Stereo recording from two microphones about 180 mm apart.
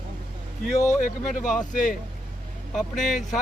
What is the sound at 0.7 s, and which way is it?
Speech, 15° left (ahead or behind).